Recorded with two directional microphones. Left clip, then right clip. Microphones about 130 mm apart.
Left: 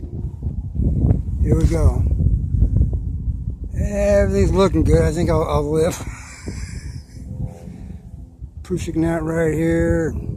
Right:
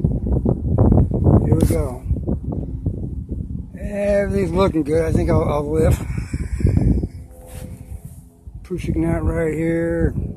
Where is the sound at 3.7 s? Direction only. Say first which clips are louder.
Left 2 dB; 25° left (ahead or behind).